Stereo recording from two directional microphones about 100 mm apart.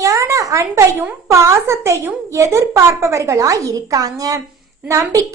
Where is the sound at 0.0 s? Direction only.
30° right (ahead or behind).